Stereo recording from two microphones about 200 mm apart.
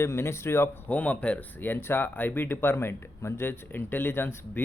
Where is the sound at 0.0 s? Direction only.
15° left (ahead or behind).